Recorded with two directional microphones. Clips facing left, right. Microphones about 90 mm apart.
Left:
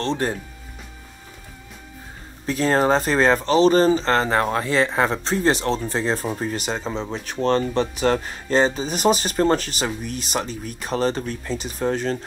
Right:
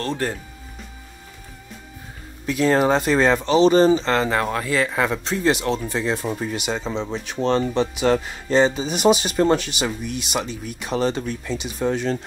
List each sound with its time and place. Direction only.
0.0 s speech: 20° left (ahead or behind)
2.4 s speech: 35° left (ahead or behind)